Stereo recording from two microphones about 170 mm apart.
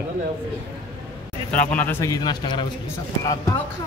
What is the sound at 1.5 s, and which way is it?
A man's voice, 10° left (ahead or behind).